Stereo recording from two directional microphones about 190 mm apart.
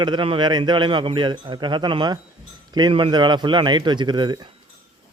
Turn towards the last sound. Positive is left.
turn(degrees=-25)  # may be behind; listen again after turning